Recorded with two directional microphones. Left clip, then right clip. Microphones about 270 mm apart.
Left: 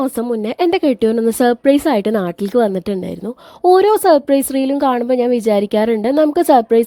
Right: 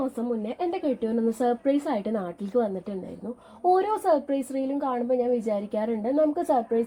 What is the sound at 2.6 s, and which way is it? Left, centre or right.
Speech, left.